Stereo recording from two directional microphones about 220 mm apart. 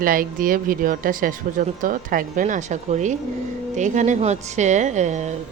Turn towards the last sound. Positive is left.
turn(degrees=-30)  # may be behind; listen again after turning